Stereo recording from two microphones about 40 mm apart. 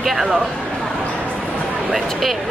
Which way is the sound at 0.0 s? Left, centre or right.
Centre.